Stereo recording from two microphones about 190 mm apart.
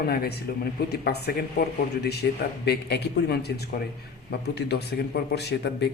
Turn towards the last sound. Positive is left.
turn(degrees=60)  # may be behind; listen again after turning